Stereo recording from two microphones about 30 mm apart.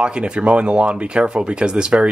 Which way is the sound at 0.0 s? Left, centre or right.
Right.